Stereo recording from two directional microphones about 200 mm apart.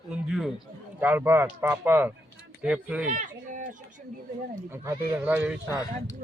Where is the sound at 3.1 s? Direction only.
40° right (ahead or behind).